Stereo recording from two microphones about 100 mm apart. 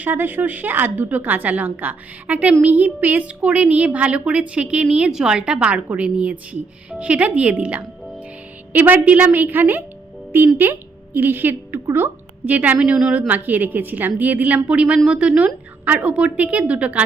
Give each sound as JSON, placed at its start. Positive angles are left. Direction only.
{"t": 0.0, "sound": "a woman's voice", "side_deg": -20}